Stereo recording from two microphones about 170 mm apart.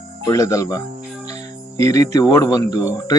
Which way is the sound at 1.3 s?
40° right (ahead or behind).